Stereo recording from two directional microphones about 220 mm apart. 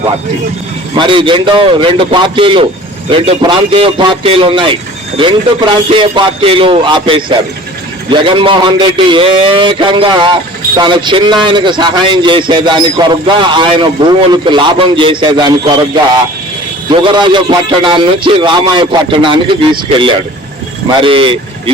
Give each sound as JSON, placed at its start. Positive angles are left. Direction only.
{"t": 0.9, "sound": "a man's voice", "side_deg": -20}
{"t": 16.9, "sound": "a man's voice", "side_deg": -20}